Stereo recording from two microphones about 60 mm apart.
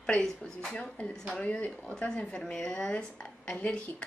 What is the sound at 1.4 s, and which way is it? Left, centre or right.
A woman's voice, left.